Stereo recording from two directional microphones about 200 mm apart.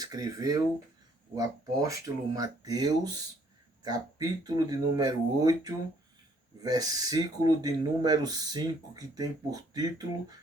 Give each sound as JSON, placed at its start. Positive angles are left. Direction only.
{"t": 0.0, "sound": "speech", "side_deg": -20}